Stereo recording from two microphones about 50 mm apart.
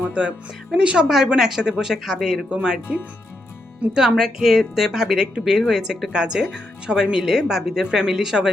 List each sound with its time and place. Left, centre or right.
0.1 s speech: right
1.0 s speech: centre
2.5 s speech: centre
3.9 s speech: centre